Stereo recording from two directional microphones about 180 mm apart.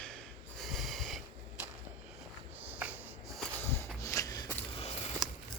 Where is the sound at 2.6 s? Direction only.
10° right (ahead or behind).